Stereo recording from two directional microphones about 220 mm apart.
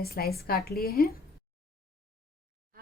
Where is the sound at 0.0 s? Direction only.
45° left (ahead or behind).